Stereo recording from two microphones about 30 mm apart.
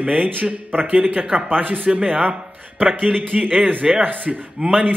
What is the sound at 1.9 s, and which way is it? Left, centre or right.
Speech, right.